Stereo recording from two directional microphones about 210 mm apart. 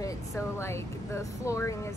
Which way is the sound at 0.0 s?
15° left (ahead or behind).